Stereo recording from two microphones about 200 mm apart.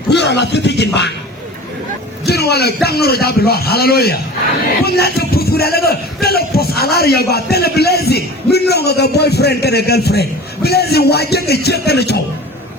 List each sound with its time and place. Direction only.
0.1 s speech: 60° left (ahead or behind)
2.2 s a man's voice: 55° left (ahead or behind)